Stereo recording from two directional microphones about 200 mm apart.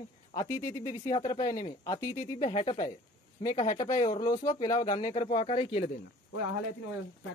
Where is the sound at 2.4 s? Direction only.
30° left (ahead or behind).